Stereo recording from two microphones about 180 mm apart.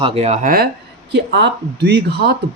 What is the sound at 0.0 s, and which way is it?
Speech, 35° right (ahead or behind).